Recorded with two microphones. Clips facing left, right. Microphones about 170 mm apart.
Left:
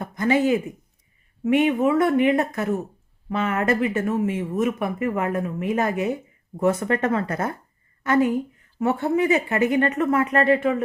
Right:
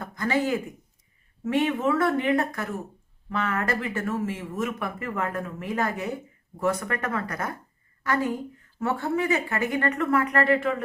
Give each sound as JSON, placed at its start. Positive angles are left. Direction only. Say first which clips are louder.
{"t": 0.0, "sound": "a man's voice", "louder": "left 5 dB", "side_deg": 20}